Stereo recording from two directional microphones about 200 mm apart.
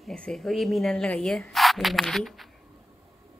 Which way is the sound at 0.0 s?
5° left (ahead or behind).